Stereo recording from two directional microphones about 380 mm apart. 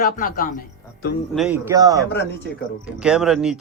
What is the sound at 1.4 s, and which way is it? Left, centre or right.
A man's voice, centre.